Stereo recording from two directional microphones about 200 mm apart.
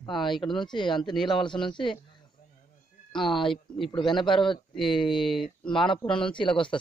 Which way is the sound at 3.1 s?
25° left (ahead or behind).